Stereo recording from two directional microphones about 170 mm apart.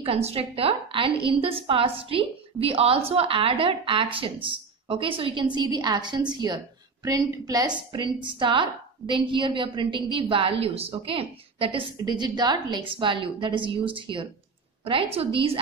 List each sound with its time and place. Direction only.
0.0 s a woman's voice: 35° right (ahead or behind)